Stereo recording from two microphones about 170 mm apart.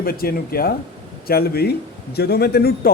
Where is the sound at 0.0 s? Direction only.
60° left (ahead or behind).